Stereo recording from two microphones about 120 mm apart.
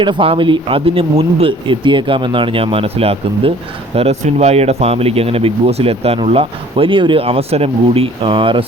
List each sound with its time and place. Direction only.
0.0 s speech: 45° right (ahead or behind)